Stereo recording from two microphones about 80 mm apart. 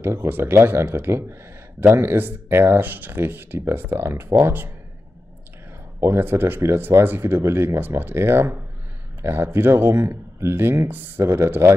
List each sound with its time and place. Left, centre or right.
0.0 s speech: right
5.9 s speech: right